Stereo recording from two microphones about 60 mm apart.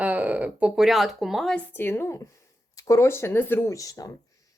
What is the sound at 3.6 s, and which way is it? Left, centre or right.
Speech, left.